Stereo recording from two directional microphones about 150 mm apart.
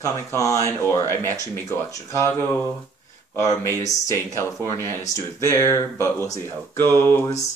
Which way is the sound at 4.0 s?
20° left (ahead or behind).